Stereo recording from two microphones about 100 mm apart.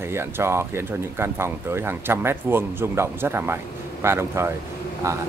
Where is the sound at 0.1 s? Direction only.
25° right (ahead or behind).